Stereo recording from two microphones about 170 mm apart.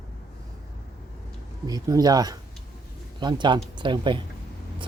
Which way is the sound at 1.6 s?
20° right (ahead or behind).